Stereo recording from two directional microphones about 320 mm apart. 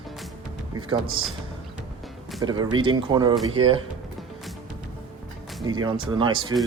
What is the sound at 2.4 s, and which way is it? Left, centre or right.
Speech, centre.